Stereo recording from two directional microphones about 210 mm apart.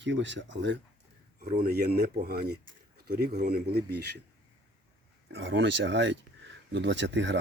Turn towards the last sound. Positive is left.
turn(degrees=-60)  # may be behind; listen again after turning